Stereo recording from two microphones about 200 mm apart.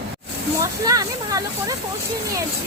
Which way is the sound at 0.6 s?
15° right (ahead or behind).